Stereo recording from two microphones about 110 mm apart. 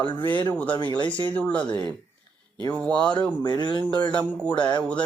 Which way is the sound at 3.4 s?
40° left (ahead or behind).